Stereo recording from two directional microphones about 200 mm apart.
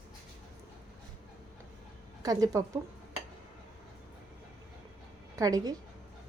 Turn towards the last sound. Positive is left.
turn(degrees=-15)  # may be behind; listen again after turning